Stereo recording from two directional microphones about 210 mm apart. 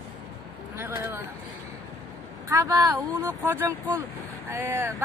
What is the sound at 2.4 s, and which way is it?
Speech, 15° right (ahead or behind).